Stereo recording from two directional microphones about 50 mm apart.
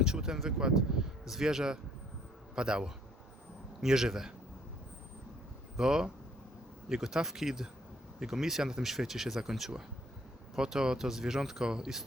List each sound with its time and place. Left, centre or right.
0.0 s speech: centre
5.7 s speech: centre